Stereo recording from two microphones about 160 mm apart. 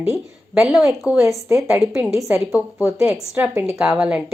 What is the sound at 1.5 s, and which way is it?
Speech, 15° right (ahead or behind).